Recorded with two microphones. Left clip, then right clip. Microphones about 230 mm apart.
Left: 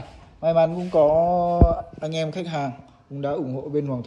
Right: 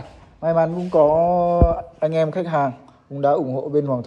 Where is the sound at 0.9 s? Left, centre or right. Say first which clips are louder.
Right 5 dB; right.